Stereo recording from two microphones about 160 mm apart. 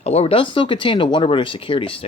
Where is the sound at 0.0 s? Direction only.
40° left (ahead or behind).